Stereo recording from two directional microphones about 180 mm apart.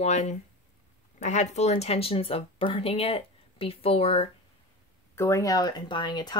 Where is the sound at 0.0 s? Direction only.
40° left (ahead or behind).